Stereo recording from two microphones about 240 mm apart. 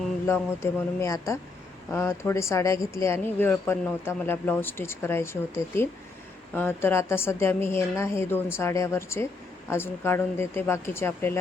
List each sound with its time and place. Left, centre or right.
0.3 s speech: centre